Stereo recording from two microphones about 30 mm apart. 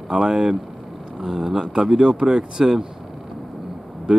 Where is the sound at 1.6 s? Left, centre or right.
Right.